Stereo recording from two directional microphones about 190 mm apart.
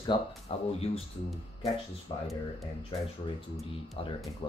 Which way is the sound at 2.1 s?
20° left (ahead or behind).